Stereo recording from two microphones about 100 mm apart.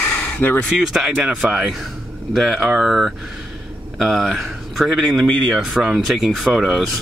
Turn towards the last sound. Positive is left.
turn(degrees=-5)  # may be behind; listen again after turning